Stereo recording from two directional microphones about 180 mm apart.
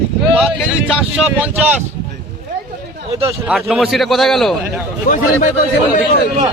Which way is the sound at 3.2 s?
15° right (ahead or behind).